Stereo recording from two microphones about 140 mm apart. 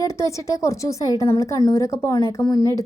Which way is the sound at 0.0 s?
25° left (ahead or behind).